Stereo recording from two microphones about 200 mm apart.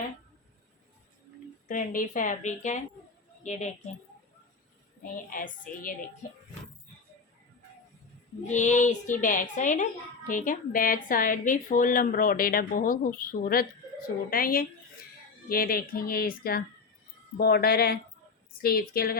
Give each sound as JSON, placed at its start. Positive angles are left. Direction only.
{"t": 1.6, "sound": "a child's voice", "side_deg": 40}
{"t": 5.0, "sound": "speech", "side_deg": 45}
{"t": 8.4, "sound": "a child's voice", "side_deg": 35}